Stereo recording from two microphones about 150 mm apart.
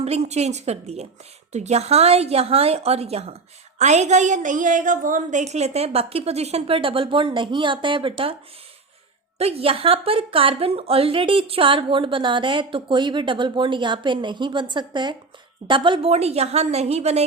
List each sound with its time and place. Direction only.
0.0 s a woman's voice: 45° right (ahead or behind)
9.4 s a woman's voice: 40° right (ahead or behind)